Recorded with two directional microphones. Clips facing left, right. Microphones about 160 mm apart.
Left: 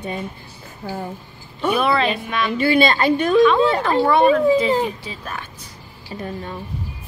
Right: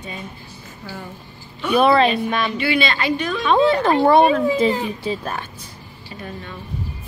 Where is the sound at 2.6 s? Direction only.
45° left (ahead or behind).